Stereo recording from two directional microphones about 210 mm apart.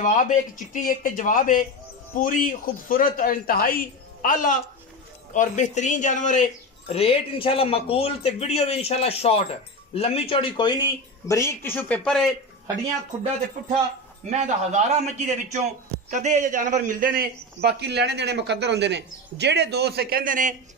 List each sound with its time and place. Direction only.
0.0 s a man's voice: 40° left (ahead or behind); by 12.3 s 5° left (ahead or behind)
14.3 s a man's voice: 35° right (ahead or behind)